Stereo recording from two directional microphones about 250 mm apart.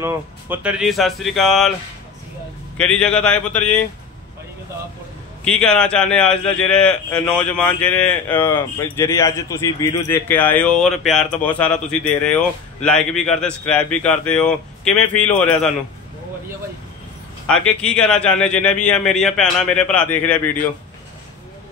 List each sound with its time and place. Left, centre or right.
0.0 s a man's voice: centre
3.0 s a man's voice: centre
5.6 s a man's voice: centre
17.5 s a man's voice: centre